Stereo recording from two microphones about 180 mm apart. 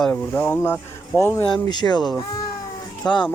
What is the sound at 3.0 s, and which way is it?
Speech, 25° left (ahead or behind).